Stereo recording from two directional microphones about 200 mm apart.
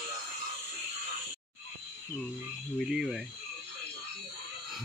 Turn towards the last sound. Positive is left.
turn(degrees=0)  # may be behind; listen again after turning